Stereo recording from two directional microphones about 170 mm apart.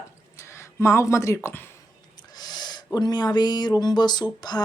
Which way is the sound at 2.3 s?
25° left (ahead or behind).